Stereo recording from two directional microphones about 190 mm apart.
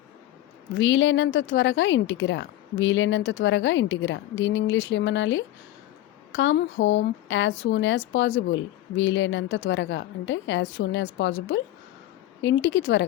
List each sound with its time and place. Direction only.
0.7 s speech: 80° left